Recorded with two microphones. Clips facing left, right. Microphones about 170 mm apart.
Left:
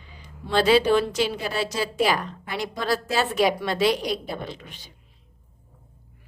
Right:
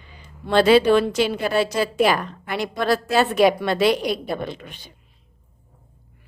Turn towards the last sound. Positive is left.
turn(degrees=-60)  # may be behind; listen again after turning